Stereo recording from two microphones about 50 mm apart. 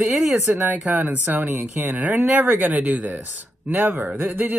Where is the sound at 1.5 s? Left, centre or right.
Right.